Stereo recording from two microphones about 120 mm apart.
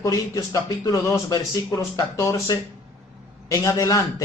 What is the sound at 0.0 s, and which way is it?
A man's voice, 30° left (ahead or behind).